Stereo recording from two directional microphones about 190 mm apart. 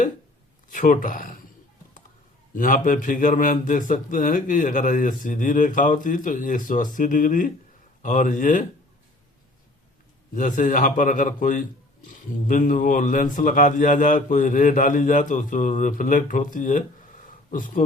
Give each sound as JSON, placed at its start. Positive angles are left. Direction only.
{"t": 0.7, "sound": "a man's voice", "side_deg": 45}
{"t": 2.5, "sound": "a man's voice", "side_deg": 45}
{"t": 10.3, "sound": "a man's voice", "side_deg": 45}
{"t": 17.2, "sound": "a sound", "side_deg": 45}